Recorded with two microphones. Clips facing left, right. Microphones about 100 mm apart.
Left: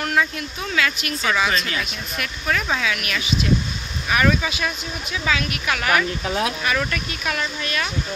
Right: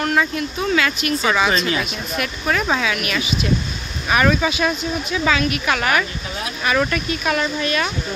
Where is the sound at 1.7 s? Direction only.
15° right (ahead or behind).